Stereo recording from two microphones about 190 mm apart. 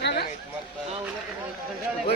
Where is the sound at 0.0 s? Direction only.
60° left (ahead or behind).